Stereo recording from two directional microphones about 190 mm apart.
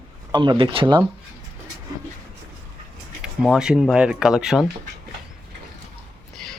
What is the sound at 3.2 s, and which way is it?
Speech, 5° right (ahead or behind).